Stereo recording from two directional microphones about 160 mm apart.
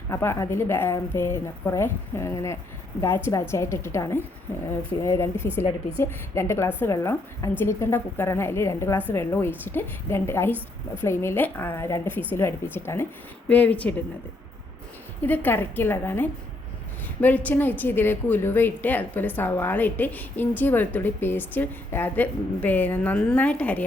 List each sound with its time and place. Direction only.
0.1 s a woman's voice: 15° left (ahead or behind)
15.2 s a woman's voice: 10° left (ahead or behind)